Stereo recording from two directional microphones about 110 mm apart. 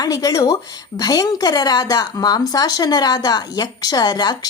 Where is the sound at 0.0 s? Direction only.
35° left (ahead or behind).